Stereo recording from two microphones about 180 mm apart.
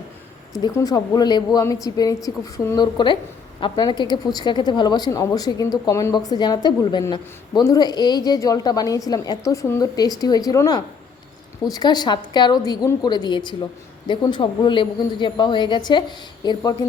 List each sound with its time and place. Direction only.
0.6 s speech: 20° left (ahead or behind)